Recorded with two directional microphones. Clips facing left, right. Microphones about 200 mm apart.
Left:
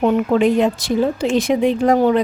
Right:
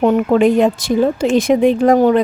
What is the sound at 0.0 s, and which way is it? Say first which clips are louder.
Speech: right 3 dB; 50° right (ahead or behind).